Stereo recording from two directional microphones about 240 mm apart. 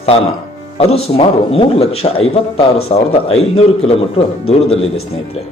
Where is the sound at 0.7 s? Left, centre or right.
Left.